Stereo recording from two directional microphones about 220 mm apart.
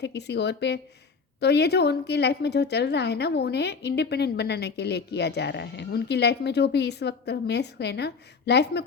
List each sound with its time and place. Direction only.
0.0 s a woman's voice: 50° left (ahead or behind)